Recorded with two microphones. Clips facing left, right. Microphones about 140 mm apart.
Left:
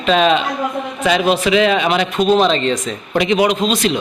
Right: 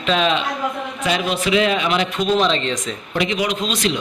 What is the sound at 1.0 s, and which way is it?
A man's voice, 90° left.